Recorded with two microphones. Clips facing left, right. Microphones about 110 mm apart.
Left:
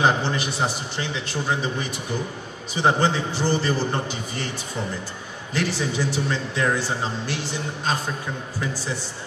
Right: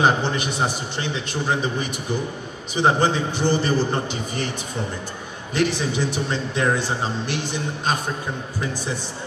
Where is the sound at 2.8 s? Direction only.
20° right (ahead or behind).